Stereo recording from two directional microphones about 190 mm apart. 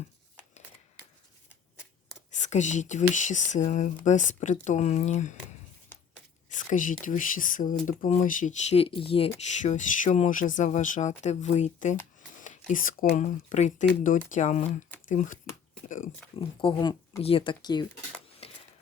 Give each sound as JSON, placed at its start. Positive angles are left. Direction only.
{"t": 2.3, "sound": "speech", "side_deg": 40}
{"t": 6.5, "sound": "speech", "side_deg": 40}
{"t": 9.6, "sound": "speech", "side_deg": 40}
{"t": 16.6, "sound": "speech", "side_deg": 25}
{"t": 18.4, "sound": "a sound", "side_deg": 30}